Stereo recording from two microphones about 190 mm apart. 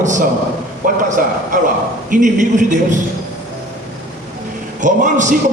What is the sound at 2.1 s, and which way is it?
Speech, 40° right (ahead or behind).